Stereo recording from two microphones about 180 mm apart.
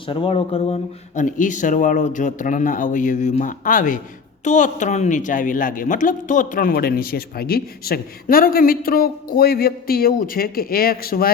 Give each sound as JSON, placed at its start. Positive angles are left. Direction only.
{"t": 0.1, "sound": "a woman's voice", "side_deg": 30}